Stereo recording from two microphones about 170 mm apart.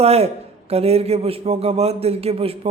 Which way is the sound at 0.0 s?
35° right (ahead or behind).